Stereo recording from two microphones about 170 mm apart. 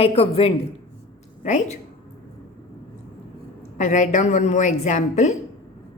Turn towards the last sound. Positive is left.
turn(degrees=45)  # may be behind; listen again after turning